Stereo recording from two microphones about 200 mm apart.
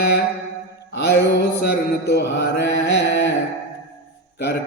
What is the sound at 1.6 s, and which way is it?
Mantra, 55° left (ahead or behind).